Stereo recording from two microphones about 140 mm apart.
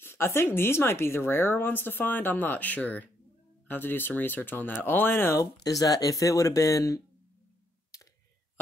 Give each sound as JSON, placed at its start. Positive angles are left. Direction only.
{"t": 0.0, "sound": "speech", "side_deg": 15}
{"t": 7.9, "sound": "clicking", "side_deg": 25}